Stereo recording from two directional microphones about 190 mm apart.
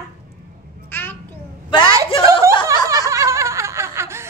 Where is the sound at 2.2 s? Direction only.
15° right (ahead or behind).